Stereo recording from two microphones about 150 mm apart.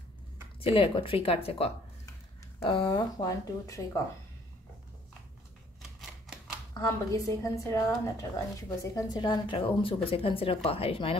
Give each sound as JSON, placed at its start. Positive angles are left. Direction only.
{"t": 0.6, "sound": "a woman's voice", "side_deg": 35}
{"t": 5.8, "sound": "typewriter", "side_deg": 0}
{"t": 6.7, "sound": "a woman's voice", "side_deg": 20}